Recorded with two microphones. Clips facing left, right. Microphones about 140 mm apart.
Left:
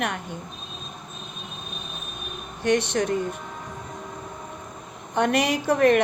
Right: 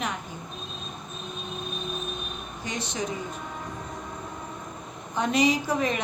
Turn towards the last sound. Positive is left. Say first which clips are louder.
# left 7 dB
turn(degrees=60)  # may be behind; listen again after turning